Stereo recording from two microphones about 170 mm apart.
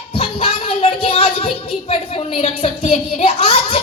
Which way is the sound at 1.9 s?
35° left (ahead or behind).